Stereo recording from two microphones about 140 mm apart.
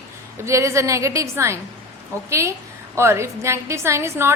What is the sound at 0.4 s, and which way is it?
A woman's voice, 20° right (ahead or behind).